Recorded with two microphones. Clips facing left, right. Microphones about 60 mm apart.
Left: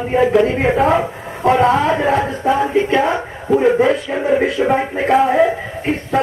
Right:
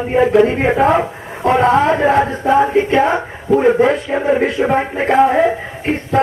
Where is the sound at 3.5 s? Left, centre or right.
Centre.